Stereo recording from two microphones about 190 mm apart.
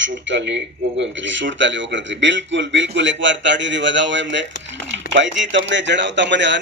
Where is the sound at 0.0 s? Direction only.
70° right (ahead or behind).